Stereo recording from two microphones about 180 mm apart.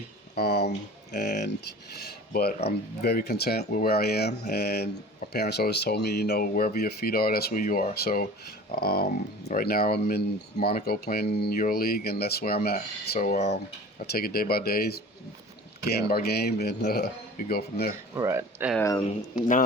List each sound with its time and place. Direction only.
0.3 s speech: 65° left (ahead or behind); by 13.5 s 45° left (ahead or behind)
14.1 s speech: 55° left (ahead or behind)
18.1 s speech: 15° right (ahead or behind)
18.8 s speech: 20° left (ahead or behind)